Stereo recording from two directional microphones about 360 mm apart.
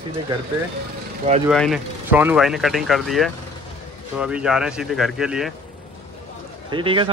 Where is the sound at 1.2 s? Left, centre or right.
Centre.